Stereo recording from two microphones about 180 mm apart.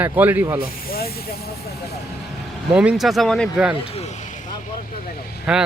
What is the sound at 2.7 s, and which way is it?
Speech, 5° right (ahead or behind).